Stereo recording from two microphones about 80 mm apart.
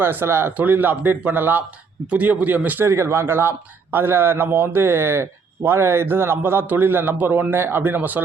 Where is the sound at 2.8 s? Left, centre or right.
Right.